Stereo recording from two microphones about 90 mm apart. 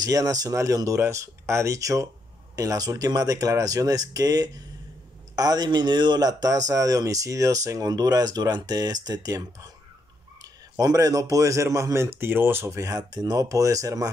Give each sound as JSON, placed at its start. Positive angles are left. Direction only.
{"t": 0.0, "sound": "a man's voice", "side_deg": -40}